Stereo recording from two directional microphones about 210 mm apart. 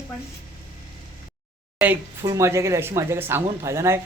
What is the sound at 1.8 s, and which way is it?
Speech, 10° right (ahead or behind).